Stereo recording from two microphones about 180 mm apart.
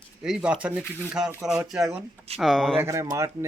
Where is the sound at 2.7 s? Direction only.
15° right (ahead or behind).